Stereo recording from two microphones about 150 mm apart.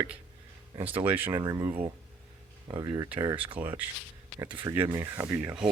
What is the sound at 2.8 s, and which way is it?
Speech, 25° right (ahead or behind).